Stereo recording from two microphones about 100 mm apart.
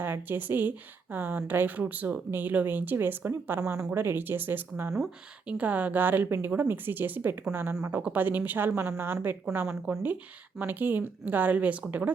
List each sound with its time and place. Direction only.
0.0 s speech: 20° right (ahead or behind)